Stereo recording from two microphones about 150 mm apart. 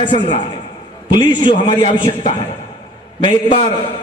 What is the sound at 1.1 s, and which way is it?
A man's voice, 30° left (ahead or behind).